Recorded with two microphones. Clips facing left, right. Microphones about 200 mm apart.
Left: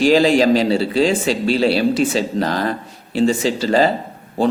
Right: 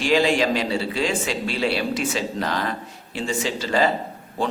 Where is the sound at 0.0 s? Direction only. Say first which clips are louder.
Left 6 dB; 35° left (ahead or behind).